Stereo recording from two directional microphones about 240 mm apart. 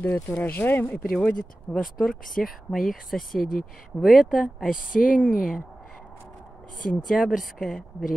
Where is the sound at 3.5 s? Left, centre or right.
Left.